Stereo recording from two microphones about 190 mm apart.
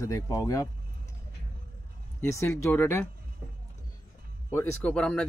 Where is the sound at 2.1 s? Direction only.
15° left (ahead or behind).